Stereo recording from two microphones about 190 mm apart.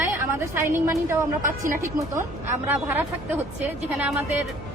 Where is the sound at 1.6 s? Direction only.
45° right (ahead or behind).